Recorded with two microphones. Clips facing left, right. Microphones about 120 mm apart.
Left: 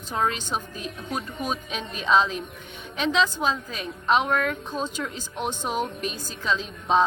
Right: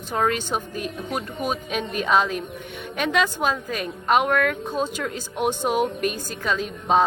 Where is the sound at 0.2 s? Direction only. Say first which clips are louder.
Right 3 dB; 55° right (ahead or behind).